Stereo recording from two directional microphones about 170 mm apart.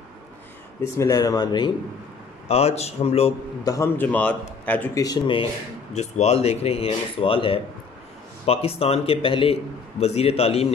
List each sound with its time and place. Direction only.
0.9 s speech: 20° left (ahead or behind)
2.4 s a man's voice: 35° left (ahead or behind)
3.6 s a man's voice: 15° left (ahead or behind)
5.0 s a man's voice: 25° left (ahead or behind)